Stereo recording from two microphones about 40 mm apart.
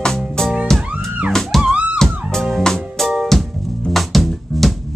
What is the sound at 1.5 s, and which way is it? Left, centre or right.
Music, centre.